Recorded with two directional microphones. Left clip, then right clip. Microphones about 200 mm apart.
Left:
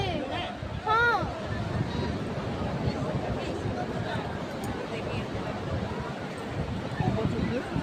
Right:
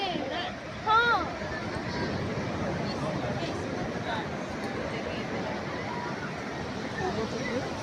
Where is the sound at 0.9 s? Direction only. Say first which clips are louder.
Right 1 dB; 30° left (ahead or behind).